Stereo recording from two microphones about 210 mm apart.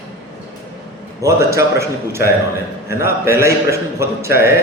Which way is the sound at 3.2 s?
15° right (ahead or behind).